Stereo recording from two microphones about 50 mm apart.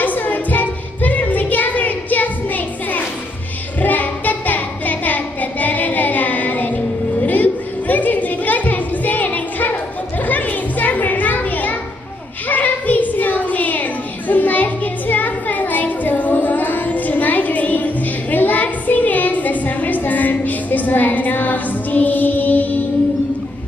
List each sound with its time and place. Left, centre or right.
0.0 s music: left
3.8 s child singing: left
10.2 s children playing: left
12.4 s a sound: left